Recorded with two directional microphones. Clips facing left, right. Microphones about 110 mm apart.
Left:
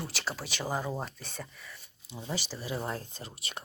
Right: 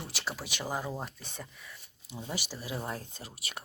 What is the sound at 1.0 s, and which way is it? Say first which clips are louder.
Speech: left 2 dB; 15° right (ahead or behind).